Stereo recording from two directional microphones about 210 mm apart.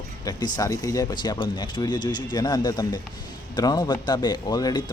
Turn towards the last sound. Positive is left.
turn(degrees=20)  # may be behind; listen again after turning